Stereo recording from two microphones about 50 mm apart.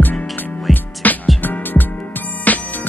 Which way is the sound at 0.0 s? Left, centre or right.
Left.